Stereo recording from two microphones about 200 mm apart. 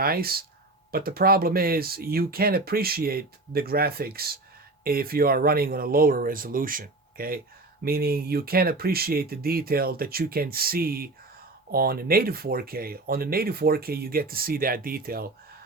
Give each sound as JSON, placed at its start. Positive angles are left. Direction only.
{"t": 0.0, "sound": "speech", "side_deg": -50}